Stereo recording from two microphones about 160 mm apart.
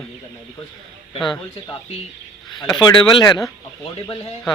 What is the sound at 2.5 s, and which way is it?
Speech, 25° left (ahead or behind).